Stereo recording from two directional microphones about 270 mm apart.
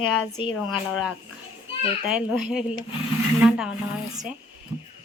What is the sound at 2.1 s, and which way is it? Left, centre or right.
Speech, centre.